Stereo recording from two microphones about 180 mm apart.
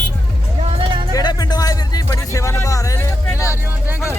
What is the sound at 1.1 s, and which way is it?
Music, 20° left (ahead or behind).